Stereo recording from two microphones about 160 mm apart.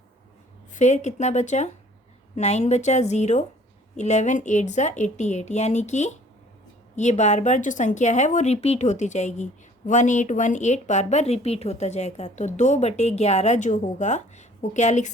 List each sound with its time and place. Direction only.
0.7 s a woman's voice: 45° left (ahead or behind)